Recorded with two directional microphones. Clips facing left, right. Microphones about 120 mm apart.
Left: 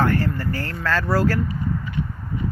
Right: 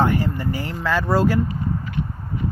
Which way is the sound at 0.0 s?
15° right (ahead or behind).